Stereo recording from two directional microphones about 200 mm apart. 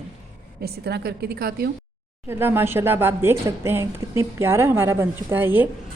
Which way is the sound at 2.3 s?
10° right (ahead or behind).